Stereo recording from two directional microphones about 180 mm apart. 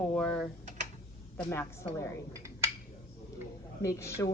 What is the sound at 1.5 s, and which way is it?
Speech, 15° left (ahead or behind).